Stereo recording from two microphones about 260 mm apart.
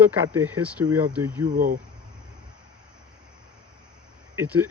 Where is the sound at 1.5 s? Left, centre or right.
Right.